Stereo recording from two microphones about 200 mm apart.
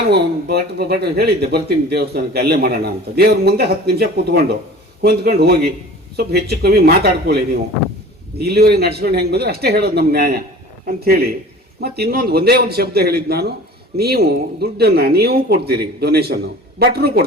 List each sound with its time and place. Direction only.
0.1 s speech: 55° right (ahead or behind)
8.4 s speech: 55° right (ahead or behind)